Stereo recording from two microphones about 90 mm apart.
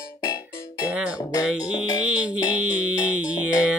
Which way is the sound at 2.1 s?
15° right (ahead or behind).